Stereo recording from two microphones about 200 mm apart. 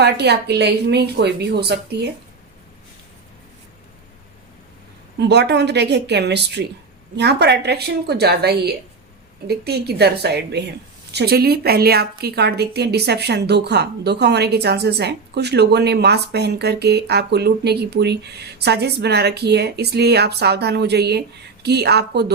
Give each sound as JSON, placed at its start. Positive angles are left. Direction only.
{"t": 0.0, "sound": "a woman's voice", "side_deg": -55}
{"t": 5.3, "sound": "a woman's voice", "side_deg": -55}